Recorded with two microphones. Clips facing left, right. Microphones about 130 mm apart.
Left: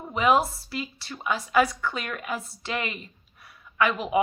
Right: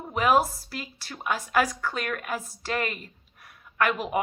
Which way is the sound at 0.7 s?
50° right (ahead or behind).